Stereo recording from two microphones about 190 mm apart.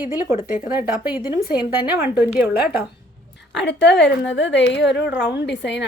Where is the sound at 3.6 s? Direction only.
70° left (ahead or behind).